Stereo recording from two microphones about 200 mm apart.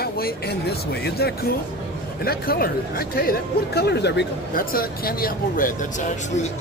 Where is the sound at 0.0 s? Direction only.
50° left (ahead or behind).